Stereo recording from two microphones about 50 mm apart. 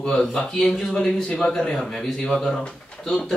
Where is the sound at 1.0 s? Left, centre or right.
Centre.